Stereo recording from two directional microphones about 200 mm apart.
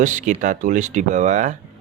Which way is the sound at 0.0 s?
40° right (ahead or behind).